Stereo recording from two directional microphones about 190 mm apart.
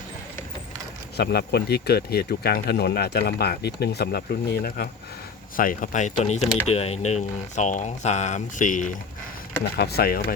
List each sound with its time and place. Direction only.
1.1 s speech: 55° left (ahead or behind)
5.5 s speech: 45° left (ahead or behind)
9.7 s speech: 55° left (ahead or behind)